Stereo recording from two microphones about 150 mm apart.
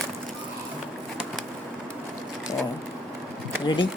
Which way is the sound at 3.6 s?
30° left (ahead or behind).